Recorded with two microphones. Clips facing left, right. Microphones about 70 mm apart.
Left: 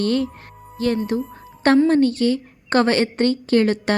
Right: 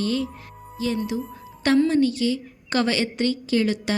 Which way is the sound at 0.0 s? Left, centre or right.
Left.